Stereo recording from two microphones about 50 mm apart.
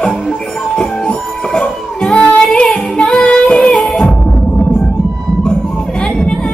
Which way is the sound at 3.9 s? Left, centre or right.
Centre.